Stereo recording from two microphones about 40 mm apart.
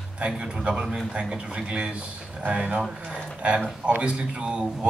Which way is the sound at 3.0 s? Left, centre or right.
Right.